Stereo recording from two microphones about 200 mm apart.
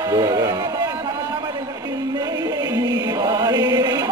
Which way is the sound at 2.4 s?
20° right (ahead or behind).